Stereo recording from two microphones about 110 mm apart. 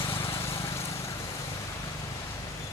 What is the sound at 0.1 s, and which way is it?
Vehicle, 25° left (ahead or behind).